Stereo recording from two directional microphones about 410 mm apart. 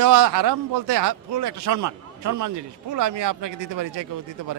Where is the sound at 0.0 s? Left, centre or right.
Right.